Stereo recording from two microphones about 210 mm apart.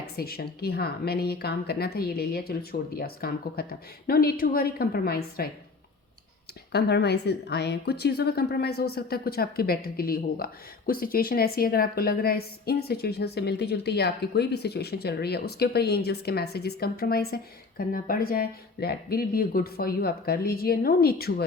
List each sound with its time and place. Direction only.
0.2 s a woman's voice: 45° left (ahead or behind)
6.7 s a woman's voice: 50° left (ahead or behind)